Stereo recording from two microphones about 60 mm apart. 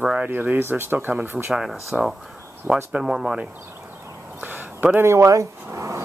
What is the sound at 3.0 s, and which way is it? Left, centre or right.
Speech, centre.